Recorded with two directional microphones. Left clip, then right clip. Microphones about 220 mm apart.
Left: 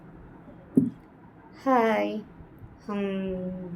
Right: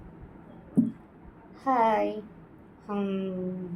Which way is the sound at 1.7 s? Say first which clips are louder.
Left 1 dB; 30° left (ahead or behind).